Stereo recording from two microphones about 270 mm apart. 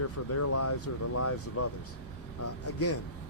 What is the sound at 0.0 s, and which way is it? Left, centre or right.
Speech, left.